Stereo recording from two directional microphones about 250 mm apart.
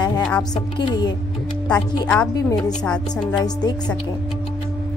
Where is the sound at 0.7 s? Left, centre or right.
Centre.